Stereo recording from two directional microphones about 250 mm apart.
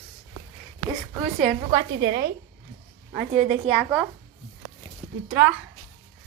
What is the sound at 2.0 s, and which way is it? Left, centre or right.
Speech, right.